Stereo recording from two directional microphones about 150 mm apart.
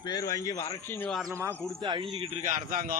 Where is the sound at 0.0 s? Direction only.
25° left (ahead or behind).